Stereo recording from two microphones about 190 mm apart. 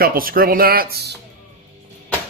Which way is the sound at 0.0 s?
50° right (ahead or behind).